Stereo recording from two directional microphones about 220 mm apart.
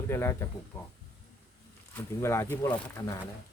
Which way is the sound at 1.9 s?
10° left (ahead or behind).